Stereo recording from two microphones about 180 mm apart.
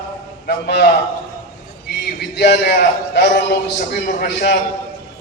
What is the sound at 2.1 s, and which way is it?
A man's voice, 65° left (ahead or behind).